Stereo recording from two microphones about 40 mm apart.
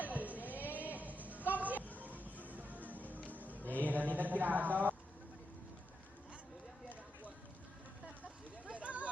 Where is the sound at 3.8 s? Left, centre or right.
Right.